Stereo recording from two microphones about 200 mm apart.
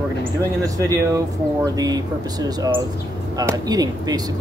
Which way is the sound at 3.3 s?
15° right (ahead or behind).